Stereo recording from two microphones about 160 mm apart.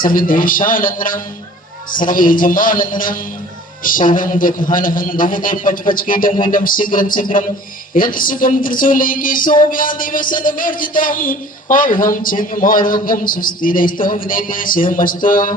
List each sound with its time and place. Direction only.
0.0 s speech: 60° left (ahead or behind)